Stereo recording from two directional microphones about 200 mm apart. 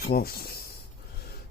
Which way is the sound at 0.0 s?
50° left (ahead or behind).